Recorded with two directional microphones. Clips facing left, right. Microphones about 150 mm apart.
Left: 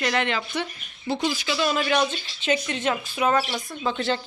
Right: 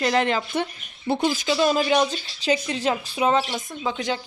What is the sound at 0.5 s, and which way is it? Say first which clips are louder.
A woman's voice: right 3 dB; 55° right (ahead or behind).